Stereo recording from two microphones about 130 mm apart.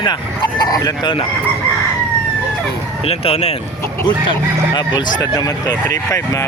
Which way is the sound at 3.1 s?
50° left (ahead or behind).